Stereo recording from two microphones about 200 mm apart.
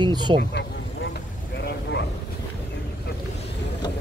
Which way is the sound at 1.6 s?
55° left (ahead or behind).